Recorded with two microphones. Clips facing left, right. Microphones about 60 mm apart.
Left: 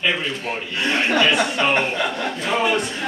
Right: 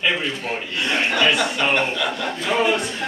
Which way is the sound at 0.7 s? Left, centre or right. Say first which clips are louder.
Left 2 dB; left.